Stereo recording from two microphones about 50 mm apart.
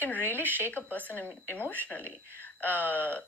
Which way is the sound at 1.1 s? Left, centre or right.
Left.